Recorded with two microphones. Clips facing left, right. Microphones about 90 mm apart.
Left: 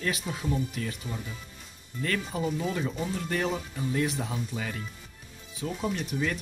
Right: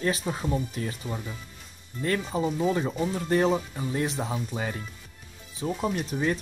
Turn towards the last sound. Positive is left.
turn(degrees=-35)  # may be behind; listen again after turning